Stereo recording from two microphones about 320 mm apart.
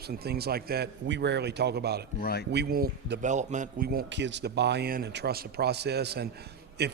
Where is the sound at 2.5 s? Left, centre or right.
Right.